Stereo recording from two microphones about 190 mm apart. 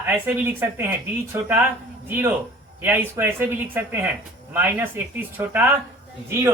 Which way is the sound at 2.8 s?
10° right (ahead or behind).